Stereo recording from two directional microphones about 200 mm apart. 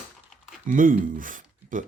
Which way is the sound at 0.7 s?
45° right (ahead or behind).